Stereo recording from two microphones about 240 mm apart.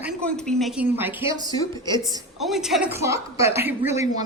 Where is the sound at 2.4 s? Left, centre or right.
Centre.